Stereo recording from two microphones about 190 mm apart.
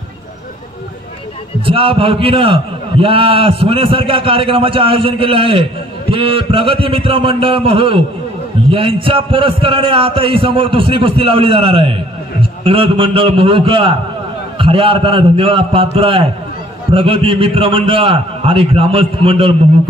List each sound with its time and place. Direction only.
1.7 s a man's voice: 30° right (ahead or behind)